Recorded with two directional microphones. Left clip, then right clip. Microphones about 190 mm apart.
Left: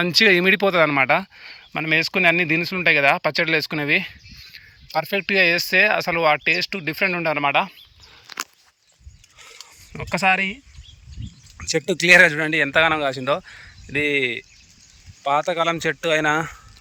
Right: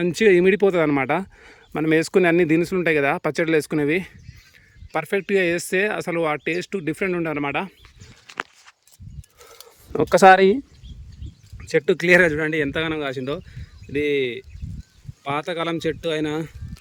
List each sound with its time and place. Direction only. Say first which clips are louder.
0.0 s speech: left 1 dB; 15° right (ahead or behind)
9.9 s speech: right 7 dB; 35° right (ahead or behind)
11.5 s a sound: right 2 dB; 15° right (ahead or behind)
11.9 s speech: left 4 dB; 20° right (ahead or behind)